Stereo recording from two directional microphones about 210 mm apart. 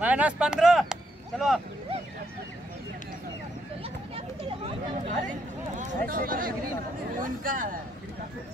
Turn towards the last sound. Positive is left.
turn(degrees=-40)  # may be behind; listen again after turning